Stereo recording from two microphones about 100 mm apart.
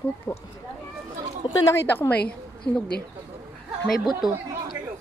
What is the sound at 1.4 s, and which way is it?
Speech, 55° left (ahead or behind).